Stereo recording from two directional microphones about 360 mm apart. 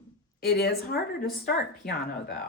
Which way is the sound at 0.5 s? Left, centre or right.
Left.